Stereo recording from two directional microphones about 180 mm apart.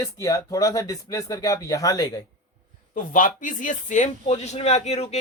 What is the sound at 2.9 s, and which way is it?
Speech, 50° left (ahead or behind).